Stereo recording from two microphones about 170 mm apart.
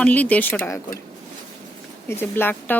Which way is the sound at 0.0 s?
10° left (ahead or behind).